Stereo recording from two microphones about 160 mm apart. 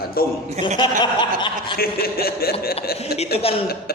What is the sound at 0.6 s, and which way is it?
Chuckle, 30° left (ahead or behind).